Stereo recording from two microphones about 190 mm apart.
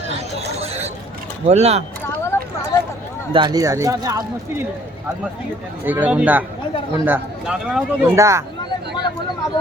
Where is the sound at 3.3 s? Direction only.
20° right (ahead or behind).